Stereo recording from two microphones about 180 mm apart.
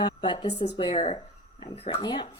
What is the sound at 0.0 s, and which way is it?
A woman's voice, 25° left (ahead or behind).